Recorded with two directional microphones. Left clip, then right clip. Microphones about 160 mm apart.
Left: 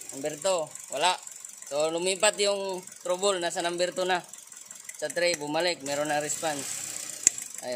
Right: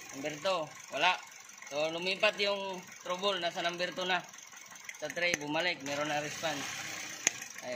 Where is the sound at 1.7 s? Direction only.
65° left (ahead or behind).